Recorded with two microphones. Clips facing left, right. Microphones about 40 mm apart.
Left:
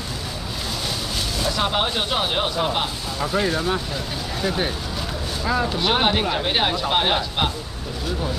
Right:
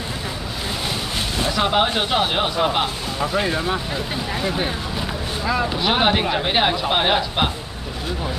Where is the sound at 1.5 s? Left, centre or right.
Centre.